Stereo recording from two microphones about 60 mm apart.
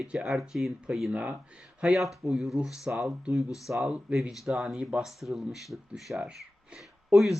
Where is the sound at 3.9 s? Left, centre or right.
Right.